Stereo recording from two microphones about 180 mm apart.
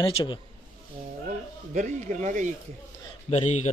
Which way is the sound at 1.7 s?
45° right (ahead or behind).